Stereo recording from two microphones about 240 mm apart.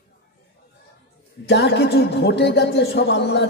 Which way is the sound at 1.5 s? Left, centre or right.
Left.